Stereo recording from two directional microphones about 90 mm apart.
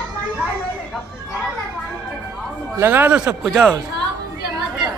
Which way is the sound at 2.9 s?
20° right (ahead or behind).